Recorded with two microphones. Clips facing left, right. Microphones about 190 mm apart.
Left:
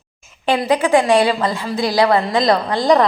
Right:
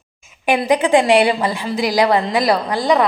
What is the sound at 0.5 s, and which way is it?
A woman's voice, 20° right (ahead or behind).